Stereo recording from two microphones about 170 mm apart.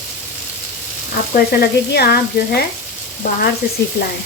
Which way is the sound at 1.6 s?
65° left (ahead or behind).